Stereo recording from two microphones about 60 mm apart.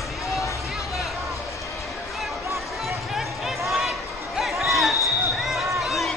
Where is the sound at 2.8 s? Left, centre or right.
Centre.